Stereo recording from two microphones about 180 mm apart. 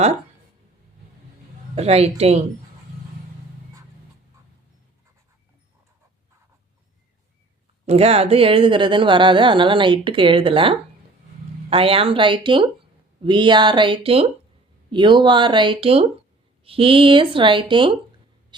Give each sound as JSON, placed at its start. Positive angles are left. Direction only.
{"t": 1.7, "sound": "a woman's voice", "side_deg": -35}
{"t": 7.9, "sound": "speech", "side_deg": -35}